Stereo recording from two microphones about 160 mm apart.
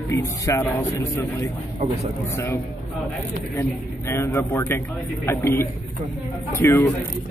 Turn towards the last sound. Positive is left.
turn(degrees=15)  # may be behind; listen again after turning